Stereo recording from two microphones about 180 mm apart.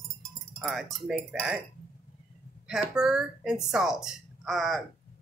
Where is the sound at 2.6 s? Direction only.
5° right (ahead or behind).